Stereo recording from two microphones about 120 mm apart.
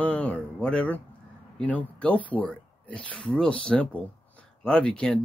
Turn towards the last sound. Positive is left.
turn(degrees=10)  # may be behind; listen again after turning